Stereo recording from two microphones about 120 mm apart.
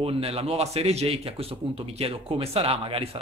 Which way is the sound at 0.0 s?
55° right (ahead or behind).